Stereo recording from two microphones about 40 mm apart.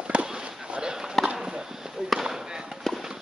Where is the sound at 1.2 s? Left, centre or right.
Centre.